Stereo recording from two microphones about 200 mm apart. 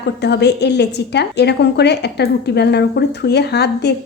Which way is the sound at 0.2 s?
55° left (ahead or behind).